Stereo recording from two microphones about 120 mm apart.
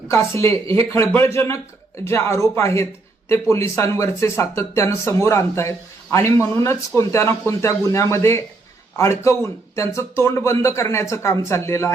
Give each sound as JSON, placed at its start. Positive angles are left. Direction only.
{"t": 0.1, "sound": "speech", "side_deg": 25}